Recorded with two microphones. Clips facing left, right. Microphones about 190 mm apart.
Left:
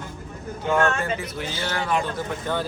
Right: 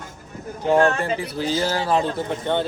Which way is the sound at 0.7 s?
35° right (ahead or behind).